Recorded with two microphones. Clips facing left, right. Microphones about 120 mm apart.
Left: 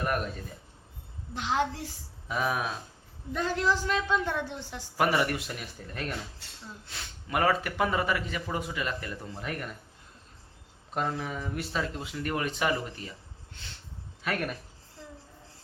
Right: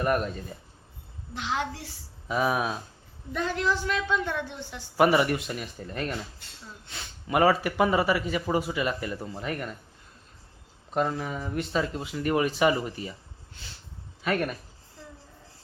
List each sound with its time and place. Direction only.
1.4 s a woman's voice: 45° left (ahead or behind)
2.2 s speech: 5° right (ahead or behind)
3.3 s a woman's voice: 35° left (ahead or behind)
4.9 s speech: 5° right (ahead or behind)
10.9 s speech: 5° right (ahead or behind)